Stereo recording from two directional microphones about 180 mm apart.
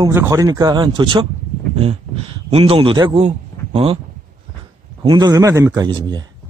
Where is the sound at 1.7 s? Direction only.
35° right (ahead or behind).